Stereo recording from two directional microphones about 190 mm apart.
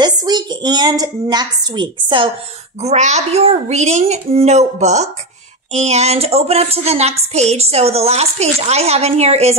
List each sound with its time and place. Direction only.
0.0 s a woman's voice: 20° right (ahead or behind)